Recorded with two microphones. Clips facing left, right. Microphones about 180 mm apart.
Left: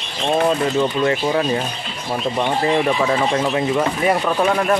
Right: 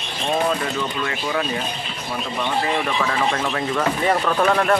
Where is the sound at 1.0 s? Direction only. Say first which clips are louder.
Left 6 dB; 30° left (ahead or behind).